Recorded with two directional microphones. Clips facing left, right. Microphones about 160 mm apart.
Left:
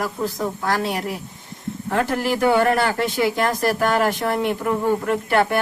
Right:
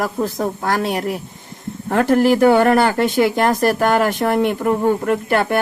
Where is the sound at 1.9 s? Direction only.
45° right (ahead or behind).